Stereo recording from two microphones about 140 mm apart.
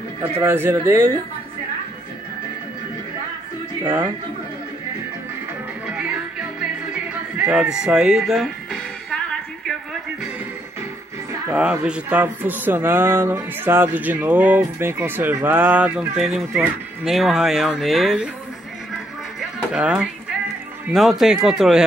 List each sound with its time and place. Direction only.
0.4 s speech: 15° right (ahead or behind)
3.8 s speech: 10° right (ahead or behind)
6.9 s music: 5° right (ahead or behind)
11.8 s speech: 10° right (ahead or behind)
19.4 s music: 5° right (ahead or behind)
20.9 s speech: centre (ahead or behind)